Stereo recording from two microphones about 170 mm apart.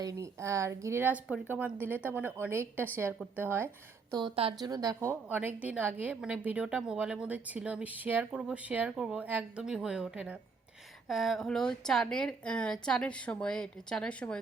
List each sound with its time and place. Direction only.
0.0 s a woman's voice: 20° right (ahead or behind)
4.1 s a woman's voice: 30° right (ahead or behind); by 14.3 s 5° left (ahead or behind)